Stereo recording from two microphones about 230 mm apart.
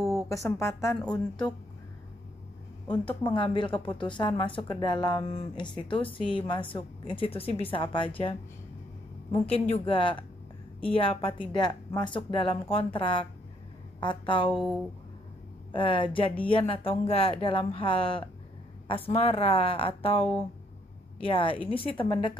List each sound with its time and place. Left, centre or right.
0.3 s a woman's voice: centre
3.3 s speech: left
9.5 s speech: left
14.5 s speech: centre
15.7 s speech: left